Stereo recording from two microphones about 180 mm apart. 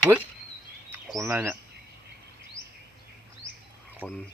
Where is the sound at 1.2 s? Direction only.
10° right (ahead or behind).